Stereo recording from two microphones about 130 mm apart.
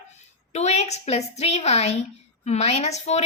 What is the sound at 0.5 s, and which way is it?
A woman's voice, 60° left (ahead or behind).